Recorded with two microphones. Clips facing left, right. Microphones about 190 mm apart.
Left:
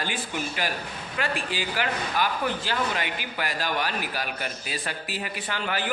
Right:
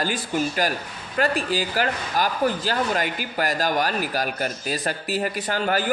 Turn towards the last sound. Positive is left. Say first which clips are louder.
# right 6 dB
turn(degrees=-40)  # may be behind; listen again after turning